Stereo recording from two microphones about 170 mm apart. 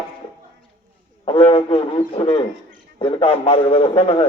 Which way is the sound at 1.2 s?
30° left (ahead or behind).